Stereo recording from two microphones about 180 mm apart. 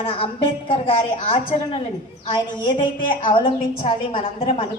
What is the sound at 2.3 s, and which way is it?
A woman's voice, 25° left (ahead or behind).